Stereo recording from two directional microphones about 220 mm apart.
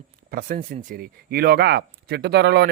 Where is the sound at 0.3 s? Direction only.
40° right (ahead or behind).